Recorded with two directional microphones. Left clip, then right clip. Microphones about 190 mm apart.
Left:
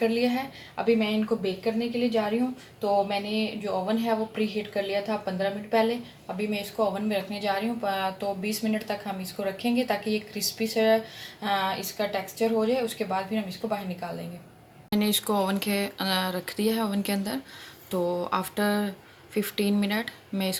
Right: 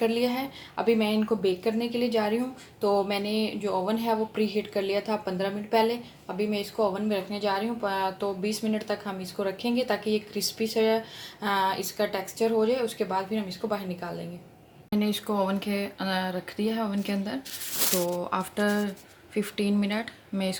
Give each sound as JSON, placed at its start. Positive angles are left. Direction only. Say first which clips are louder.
{"t": 0.0, "sound": "a woman's voice", "louder": "left 1 dB", "side_deg": -25}
{"t": 14.8, "sound": "speech", "louder": "left 3 dB", "side_deg": 0}